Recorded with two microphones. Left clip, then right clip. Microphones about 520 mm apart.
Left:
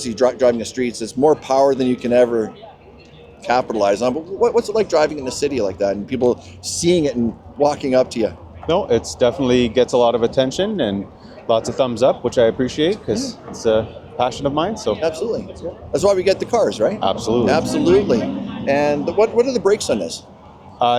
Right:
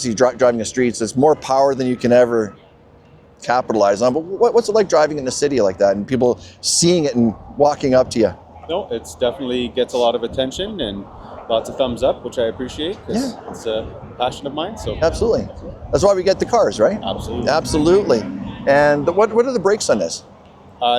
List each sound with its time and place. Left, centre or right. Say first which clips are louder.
0.0 s speech: right 1 dB; right
8.6 s speech: left 6 dB; left
14.9 s speech: right 4 dB; right
17.0 s speech: left 6 dB; left
17.4 s speech: right 3 dB; right
20.8 s speech: left 1 dB; left